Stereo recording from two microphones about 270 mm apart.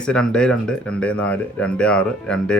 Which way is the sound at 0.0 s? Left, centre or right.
Centre.